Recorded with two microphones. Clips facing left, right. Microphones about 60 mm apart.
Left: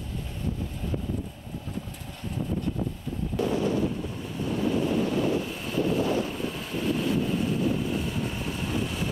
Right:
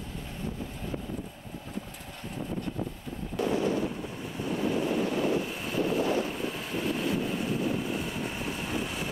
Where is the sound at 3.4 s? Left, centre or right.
Centre.